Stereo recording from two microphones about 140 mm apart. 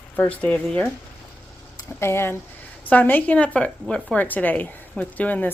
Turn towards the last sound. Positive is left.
turn(degrees=10)  # may be behind; listen again after turning